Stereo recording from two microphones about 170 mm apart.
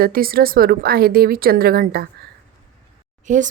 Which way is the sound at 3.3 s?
45° right (ahead or behind).